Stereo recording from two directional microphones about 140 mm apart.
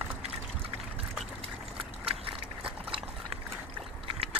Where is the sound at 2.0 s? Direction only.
40° right (ahead or behind).